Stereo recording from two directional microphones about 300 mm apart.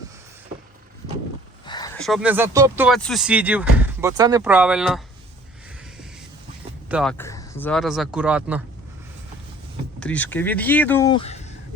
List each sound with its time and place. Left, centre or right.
1.6 s a sound: centre
2.0 s speech: centre
6.8 s speech: centre
10.0 s speech: centre